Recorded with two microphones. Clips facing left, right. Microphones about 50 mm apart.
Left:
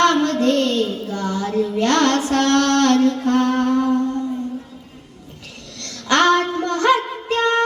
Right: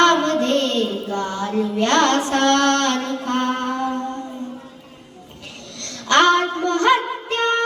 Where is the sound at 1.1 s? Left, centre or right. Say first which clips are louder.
Left 1 dB; right.